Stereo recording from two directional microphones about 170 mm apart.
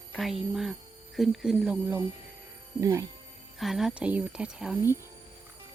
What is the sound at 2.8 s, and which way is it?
Speech, 20° right (ahead or behind).